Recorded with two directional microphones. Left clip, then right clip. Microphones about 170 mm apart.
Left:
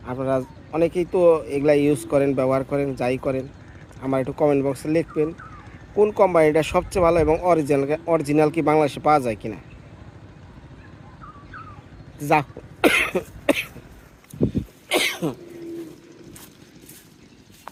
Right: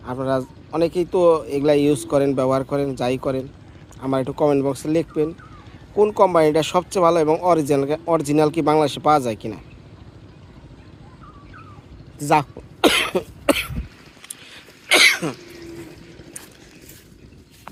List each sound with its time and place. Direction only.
0.0 s speech: 10° right (ahead or behind)
12.2 s cough: 10° right (ahead or behind)
14.8 s cough: 15° left (ahead or behind)